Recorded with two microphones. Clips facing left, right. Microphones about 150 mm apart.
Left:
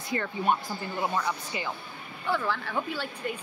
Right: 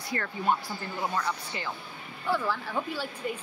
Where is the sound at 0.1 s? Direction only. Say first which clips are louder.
Left 1 dB; 15° left (ahead or behind).